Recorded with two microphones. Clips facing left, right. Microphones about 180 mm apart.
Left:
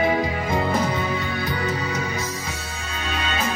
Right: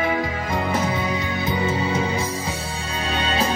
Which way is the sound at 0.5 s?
5° right (ahead or behind).